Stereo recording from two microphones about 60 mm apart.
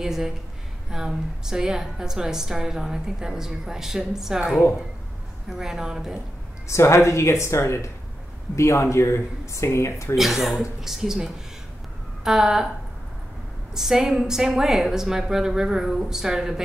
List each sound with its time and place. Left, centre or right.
0.0 s a woman's voice: centre
6.7 s speech: left
10.1 s a woman's voice: centre
13.7 s a woman's voice: centre